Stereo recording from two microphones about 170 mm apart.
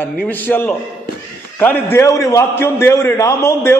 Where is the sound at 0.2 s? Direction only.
10° left (ahead or behind).